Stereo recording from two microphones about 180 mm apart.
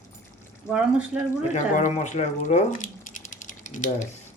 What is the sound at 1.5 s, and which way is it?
Speech, 40° left (ahead or behind).